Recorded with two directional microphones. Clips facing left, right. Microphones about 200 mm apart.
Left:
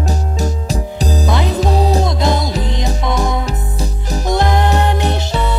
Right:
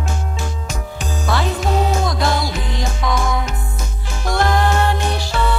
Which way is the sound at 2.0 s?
20° left (ahead or behind).